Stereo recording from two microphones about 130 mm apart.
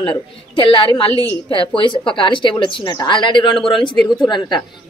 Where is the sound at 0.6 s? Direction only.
45° left (ahead or behind).